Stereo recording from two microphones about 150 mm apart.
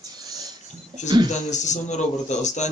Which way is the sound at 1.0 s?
55° left (ahead or behind).